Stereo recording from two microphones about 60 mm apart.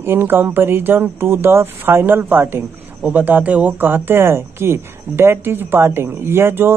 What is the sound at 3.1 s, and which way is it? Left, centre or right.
Speech, right.